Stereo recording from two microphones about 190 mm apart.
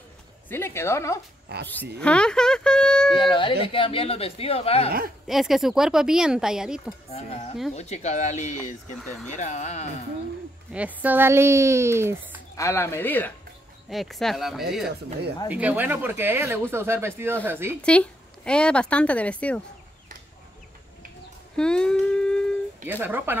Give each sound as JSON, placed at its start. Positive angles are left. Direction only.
{"t": 0.5, "sound": "speech", "side_deg": 10}
{"t": 1.5, "sound": "speech", "side_deg": -55}
{"t": 2.0, "sound": "a sound", "side_deg": 5}
{"t": 3.2, "sound": "speech", "side_deg": 25}
{"t": 5.2, "sound": "speech", "side_deg": 0}
{"t": 7.1, "sound": "speech", "side_deg": 35}
{"t": 9.0, "sound": "speech", "side_deg": 5}
{"t": 9.3, "sound": "speech", "side_deg": 40}
{"t": 10.7, "sound": "speech", "side_deg": -10}
{"t": 12.5, "sound": "speech", "side_deg": 15}
{"t": 17.8, "sound": "speech", "side_deg": 5}
{"t": 21.5, "sound": "a sound", "side_deg": 5}
{"t": 22.8, "sound": "speech", "side_deg": -10}